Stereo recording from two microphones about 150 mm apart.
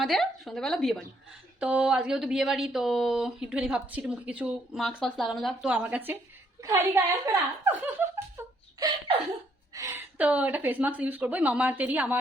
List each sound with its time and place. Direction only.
0.0 s speech: centre (ahead or behind)
1.5 s a woman's voice: 10° right (ahead or behind)
8.8 s a sound: 30° right (ahead or behind)
9.7 s speech: 20° right (ahead or behind)
10.2 s a woman's voice: 10° right (ahead or behind)